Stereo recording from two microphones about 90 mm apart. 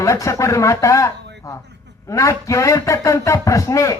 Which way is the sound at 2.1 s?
35° left (ahead or behind).